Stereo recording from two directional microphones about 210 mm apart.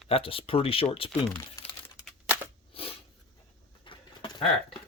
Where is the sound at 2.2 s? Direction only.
10° right (ahead or behind).